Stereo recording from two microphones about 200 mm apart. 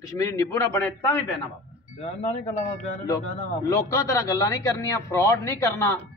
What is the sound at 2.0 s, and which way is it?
Speech, 35° left (ahead or behind).